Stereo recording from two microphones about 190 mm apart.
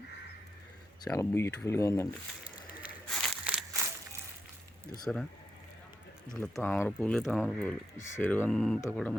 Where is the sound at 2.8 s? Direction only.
Centre (ahead or behind).